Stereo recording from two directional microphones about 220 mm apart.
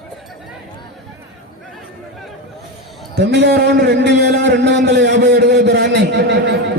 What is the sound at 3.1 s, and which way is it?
A man's voice, 50° right (ahead or behind).